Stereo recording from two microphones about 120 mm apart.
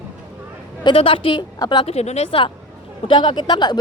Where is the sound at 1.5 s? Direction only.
35° left (ahead or behind).